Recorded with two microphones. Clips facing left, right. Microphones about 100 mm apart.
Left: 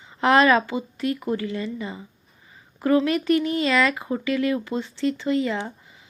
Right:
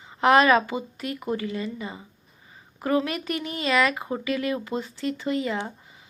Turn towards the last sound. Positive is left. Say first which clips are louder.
# left 2 dB
turn(degrees=-30)  # may be behind; listen again after turning